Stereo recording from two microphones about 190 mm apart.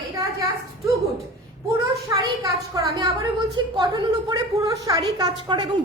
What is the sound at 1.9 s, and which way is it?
A woman's voice, 20° right (ahead or behind).